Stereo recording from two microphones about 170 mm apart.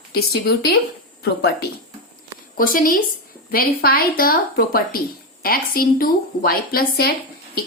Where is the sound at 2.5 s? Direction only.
55° left (ahead or behind).